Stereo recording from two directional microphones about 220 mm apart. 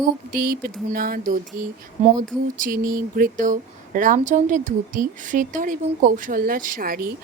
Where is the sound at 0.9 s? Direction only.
40° right (ahead or behind).